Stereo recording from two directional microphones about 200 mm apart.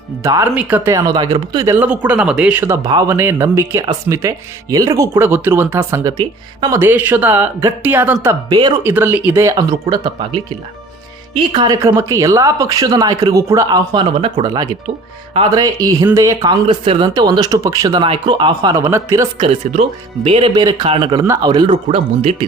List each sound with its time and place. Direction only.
0.2 s speech: 15° right (ahead or behind)
20.2 s speech: 30° right (ahead or behind)